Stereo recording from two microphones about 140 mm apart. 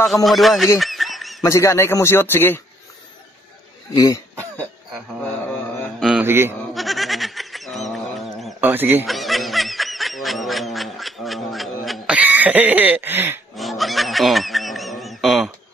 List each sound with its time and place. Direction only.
0.0 s speech: centre (ahead or behind)
0.7 s a sound: centre (ahead or behind)
1.4 s a man's voice: 20° left (ahead or behind)
3.9 s a man's voice: 25° left (ahead or behind)
5.9 s a sound: 5° right (ahead or behind)
6.2 s speech: 15° right (ahead or behind)
6.7 s a sound: centre (ahead or behind)
8.5 s speech: 15° right (ahead or behind)
9.0 s snicker: centre (ahead or behind)
12.2 s cough: 10° right (ahead or behind)
13.6 s snicker: centre (ahead or behind)